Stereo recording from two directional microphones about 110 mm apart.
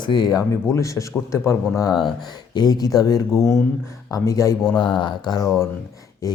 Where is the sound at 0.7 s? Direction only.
30° left (ahead or behind).